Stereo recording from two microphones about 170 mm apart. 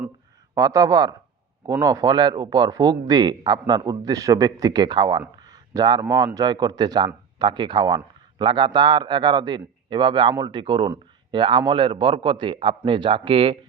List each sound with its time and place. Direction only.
0.5 s speech: 20° right (ahead or behind)